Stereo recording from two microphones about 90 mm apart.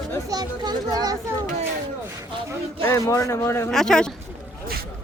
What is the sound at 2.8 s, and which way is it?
Speech, 35° left (ahead or behind).